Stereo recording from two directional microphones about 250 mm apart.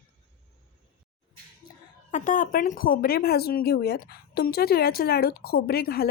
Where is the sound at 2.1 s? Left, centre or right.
Left.